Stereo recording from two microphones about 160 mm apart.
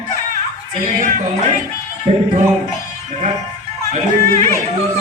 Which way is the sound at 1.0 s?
55° right (ahead or behind).